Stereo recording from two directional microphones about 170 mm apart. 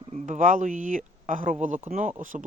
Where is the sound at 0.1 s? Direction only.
50° right (ahead or behind).